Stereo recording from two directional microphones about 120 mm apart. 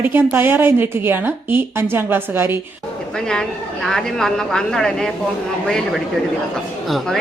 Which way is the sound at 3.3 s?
5° left (ahead or behind).